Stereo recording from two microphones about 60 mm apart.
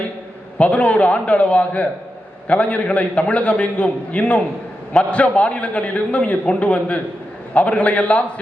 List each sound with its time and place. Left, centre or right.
0.6 s a man's voice: left